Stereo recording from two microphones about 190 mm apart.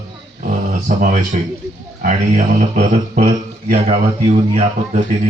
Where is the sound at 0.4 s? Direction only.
40° right (ahead or behind).